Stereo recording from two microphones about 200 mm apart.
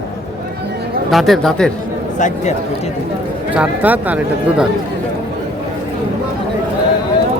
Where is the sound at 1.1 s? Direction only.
Centre (ahead or behind).